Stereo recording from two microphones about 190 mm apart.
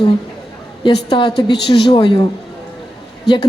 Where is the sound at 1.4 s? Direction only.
20° left (ahead or behind).